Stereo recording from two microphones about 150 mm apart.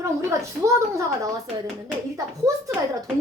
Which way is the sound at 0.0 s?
20° right (ahead or behind).